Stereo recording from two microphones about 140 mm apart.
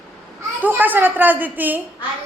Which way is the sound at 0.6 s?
15° right (ahead or behind).